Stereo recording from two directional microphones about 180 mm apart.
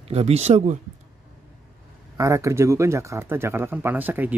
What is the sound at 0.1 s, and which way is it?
Speech, 35° right (ahead or behind).